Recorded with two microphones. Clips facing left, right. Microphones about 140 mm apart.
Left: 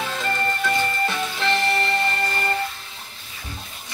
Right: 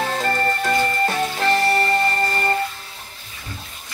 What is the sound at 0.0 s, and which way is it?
Music, 45° right (ahead or behind).